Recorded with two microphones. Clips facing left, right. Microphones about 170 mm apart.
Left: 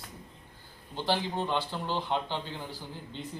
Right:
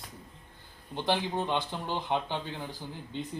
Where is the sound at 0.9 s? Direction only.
15° right (ahead or behind).